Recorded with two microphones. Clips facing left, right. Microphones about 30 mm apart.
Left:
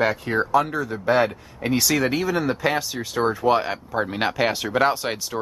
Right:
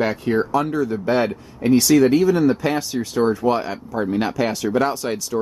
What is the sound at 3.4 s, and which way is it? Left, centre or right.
Speech, centre.